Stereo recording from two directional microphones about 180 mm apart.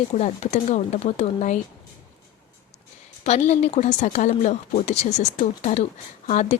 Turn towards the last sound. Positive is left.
turn(degrees=45)  # may be behind; listen again after turning